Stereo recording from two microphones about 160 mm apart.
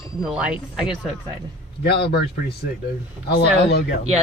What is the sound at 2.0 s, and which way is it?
Speech, 90° left.